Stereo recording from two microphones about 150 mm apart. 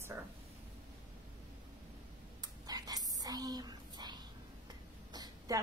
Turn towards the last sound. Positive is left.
turn(degrees=-25)  # may be behind; listen again after turning